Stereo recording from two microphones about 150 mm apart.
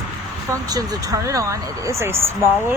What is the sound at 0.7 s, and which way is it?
Speech, 25° right (ahead or behind).